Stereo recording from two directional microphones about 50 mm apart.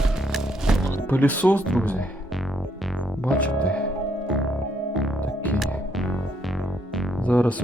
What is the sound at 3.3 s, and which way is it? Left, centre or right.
Music, left.